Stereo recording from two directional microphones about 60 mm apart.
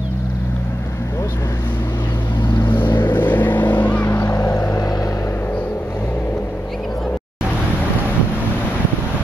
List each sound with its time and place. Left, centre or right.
2.7 s vehicle: left
4.1 s boat: left